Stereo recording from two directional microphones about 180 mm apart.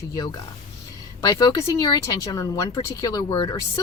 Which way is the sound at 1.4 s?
20° left (ahead or behind).